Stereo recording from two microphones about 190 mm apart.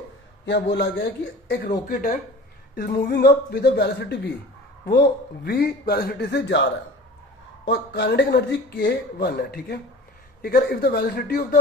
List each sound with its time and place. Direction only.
0.5 s speech: 60° left (ahead or behind)